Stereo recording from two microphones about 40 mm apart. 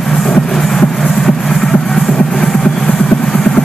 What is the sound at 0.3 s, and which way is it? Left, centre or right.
Music, centre.